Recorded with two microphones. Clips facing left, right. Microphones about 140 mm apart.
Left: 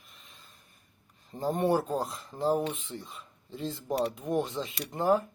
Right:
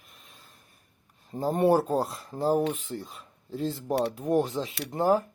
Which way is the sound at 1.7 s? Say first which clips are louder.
Right 6 dB; 35° right (ahead or behind).